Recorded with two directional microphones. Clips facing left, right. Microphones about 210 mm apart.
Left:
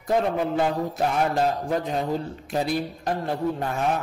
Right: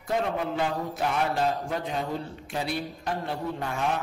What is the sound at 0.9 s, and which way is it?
Speech, 40° left (ahead or behind).